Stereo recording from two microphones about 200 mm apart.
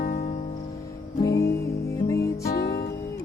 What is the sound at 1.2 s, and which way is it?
Music, 15° left (ahead or behind).